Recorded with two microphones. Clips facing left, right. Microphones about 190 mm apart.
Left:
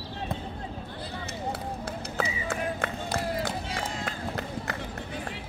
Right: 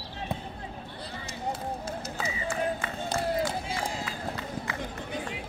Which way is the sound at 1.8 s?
60° left (ahead or behind).